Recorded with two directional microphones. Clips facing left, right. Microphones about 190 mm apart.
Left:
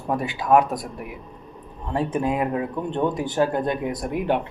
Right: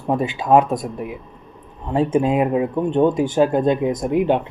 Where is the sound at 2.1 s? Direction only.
20° right (ahead or behind).